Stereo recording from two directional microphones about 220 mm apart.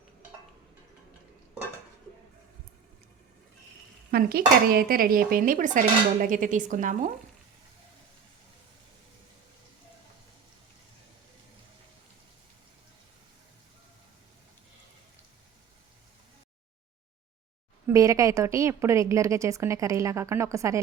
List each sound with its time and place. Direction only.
4.1 s speech: 40° right (ahead or behind)
17.8 s a woman's voice: 15° right (ahead or behind)